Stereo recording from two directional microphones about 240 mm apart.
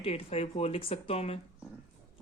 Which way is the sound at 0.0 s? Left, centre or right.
Left.